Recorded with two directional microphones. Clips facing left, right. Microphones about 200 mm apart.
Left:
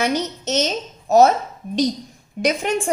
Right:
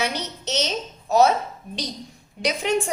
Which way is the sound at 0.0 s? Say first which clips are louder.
Left 6 dB; 50° left (ahead or behind).